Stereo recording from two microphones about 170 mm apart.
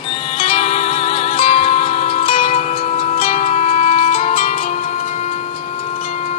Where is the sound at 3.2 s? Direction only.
40° left (ahead or behind).